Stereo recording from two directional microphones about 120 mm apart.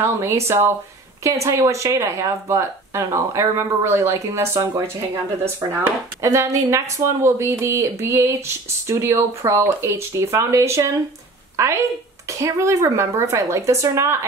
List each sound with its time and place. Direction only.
0.0 s speech: 20° right (ahead or behind)
12.3 s speech: 25° right (ahead or behind)